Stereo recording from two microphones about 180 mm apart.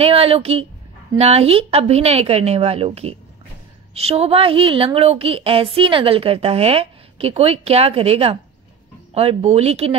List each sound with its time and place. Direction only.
0.0 s a woman's voice: 30° right (ahead or behind)